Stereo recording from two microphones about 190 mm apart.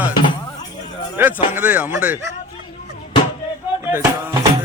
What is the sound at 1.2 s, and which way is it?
Speech, 10° right (ahead or behind).